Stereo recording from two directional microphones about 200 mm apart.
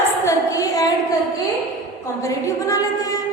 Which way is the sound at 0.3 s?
15° left (ahead or behind).